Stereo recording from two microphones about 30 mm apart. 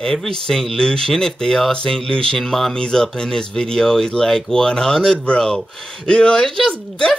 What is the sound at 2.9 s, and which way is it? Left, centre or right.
Speech, left.